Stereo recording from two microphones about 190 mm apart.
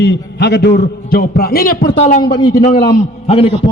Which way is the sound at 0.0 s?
65° left (ahead or behind).